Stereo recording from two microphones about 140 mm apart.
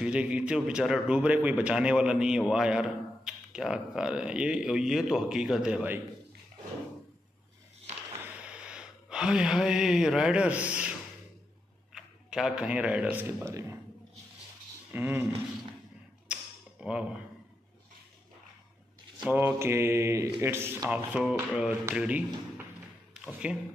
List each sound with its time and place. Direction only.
0.0 s a man's voice: 10° right (ahead or behind)
8.2 s a sound: 10° right (ahead or behind)
11.9 s a man's voice: 5° right (ahead or behind)
14.9 s speech: 15° right (ahead or behind)
16.3 s a sound: 10° right (ahead or behind)
16.8 s speech: 5° right (ahead or behind)
19.3 s speech: 15° right (ahead or behind)
23.2 s a man's voice: 5° right (ahead or behind)